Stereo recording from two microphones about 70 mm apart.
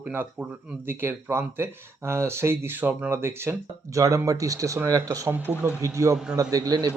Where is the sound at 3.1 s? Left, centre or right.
Right.